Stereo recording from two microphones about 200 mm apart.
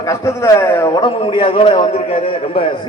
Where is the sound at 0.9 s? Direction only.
25° left (ahead or behind).